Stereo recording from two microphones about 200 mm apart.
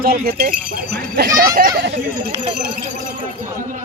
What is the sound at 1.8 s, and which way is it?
Speech, 55° right (ahead or behind).